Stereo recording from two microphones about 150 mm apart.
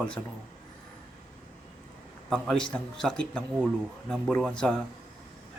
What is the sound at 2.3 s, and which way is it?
A man's voice, 5° left (ahead or behind).